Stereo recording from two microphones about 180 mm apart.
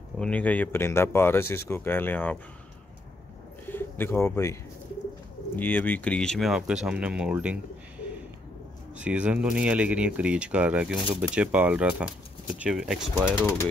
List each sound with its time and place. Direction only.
0.2 s speech: 10° left (ahead or behind)
3.6 s bird: 10° left (ahead or behind)
5.6 s speech: 10° left (ahead or behind); by 7.5 s 5° right (ahead or behind)
8.9 s speech: 5° right (ahead or behind)
13.4 s speech: 10° left (ahead or behind)